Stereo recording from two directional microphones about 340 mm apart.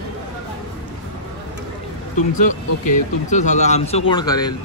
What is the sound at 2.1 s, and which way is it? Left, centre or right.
Speech, left.